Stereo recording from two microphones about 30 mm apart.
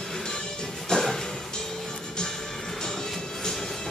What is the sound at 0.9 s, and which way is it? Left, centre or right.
Music, left.